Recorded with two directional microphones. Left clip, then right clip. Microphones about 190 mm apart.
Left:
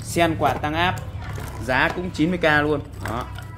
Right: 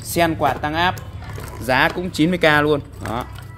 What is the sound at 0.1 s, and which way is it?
Speech, 40° right (ahead or behind).